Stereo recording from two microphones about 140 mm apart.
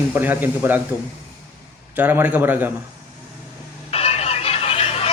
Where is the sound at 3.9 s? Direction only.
45° left (ahead or behind).